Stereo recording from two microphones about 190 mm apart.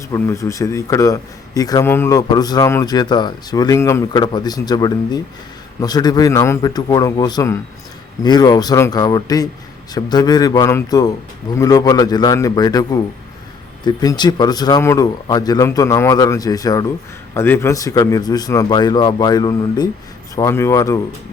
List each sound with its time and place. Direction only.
0.1 s a man's voice: 15° left (ahead or behind)